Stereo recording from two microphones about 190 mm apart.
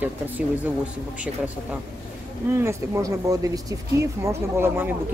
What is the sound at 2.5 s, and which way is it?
Speech, 15° right (ahead or behind).